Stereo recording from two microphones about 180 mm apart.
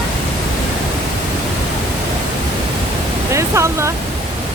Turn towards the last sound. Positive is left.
turn(degrees=-15)  # may be behind; listen again after turning